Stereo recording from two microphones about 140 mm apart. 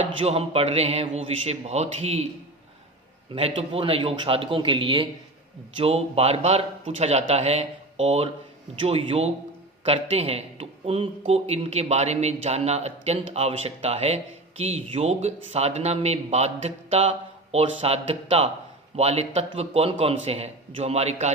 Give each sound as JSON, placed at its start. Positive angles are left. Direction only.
{"t": 0.0, "sound": "speech", "side_deg": -45}
{"t": 3.3, "sound": "a man's voice", "side_deg": -45}